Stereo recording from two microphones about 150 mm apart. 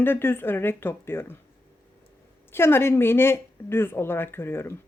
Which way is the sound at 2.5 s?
15° left (ahead or behind).